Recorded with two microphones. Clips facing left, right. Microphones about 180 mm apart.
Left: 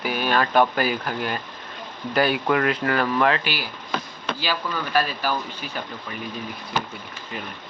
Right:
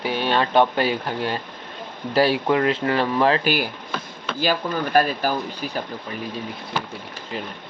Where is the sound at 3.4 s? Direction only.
45° right (ahead or behind).